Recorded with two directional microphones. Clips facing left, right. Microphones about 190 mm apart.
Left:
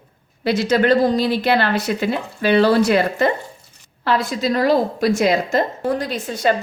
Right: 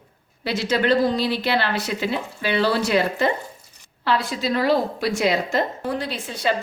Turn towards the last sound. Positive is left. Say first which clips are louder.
# left 5 dB
turn(degrees=45)  # may be behind; listen again after turning